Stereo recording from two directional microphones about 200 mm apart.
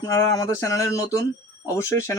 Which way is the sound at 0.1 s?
15° left (ahead or behind).